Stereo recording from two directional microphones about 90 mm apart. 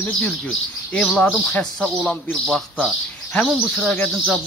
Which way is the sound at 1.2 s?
15° left (ahead or behind).